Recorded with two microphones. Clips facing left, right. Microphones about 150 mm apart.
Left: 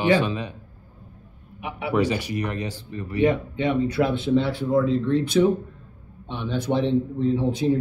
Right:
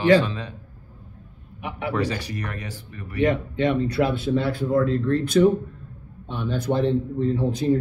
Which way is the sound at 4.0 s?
5° right (ahead or behind).